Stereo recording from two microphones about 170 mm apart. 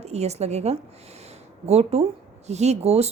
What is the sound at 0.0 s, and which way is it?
A woman's voice, 40° right (ahead or behind).